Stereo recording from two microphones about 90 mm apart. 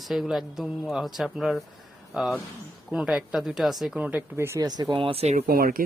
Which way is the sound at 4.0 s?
20° right (ahead or behind).